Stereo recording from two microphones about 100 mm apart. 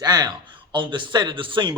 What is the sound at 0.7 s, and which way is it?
Speech, 55° right (ahead or behind).